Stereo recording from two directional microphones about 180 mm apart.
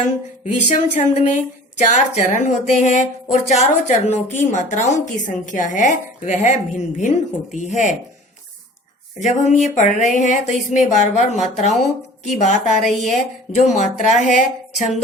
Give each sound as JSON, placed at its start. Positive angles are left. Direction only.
{"t": 0.0, "sound": "speech", "side_deg": 45}
{"t": 9.2, "sound": "speech", "side_deg": 40}